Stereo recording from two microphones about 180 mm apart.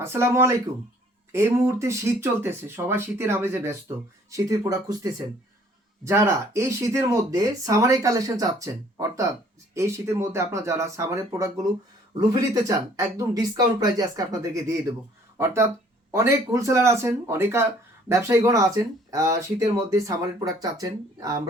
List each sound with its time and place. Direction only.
0.0 s speech: 15° right (ahead or behind)